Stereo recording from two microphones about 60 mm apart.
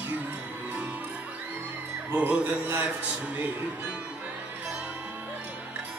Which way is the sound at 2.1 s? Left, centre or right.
Right.